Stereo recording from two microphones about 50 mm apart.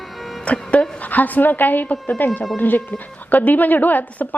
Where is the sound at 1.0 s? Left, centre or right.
Left.